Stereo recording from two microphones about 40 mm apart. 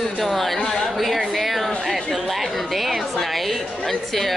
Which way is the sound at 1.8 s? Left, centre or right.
Centre.